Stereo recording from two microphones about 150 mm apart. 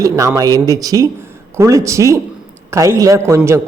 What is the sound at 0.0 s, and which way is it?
A man's voice, 20° right (ahead or behind).